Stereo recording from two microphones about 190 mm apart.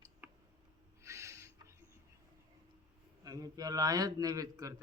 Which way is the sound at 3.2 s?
20° right (ahead or behind).